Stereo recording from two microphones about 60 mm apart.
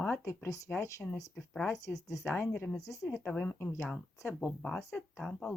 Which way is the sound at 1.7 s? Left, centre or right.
Left.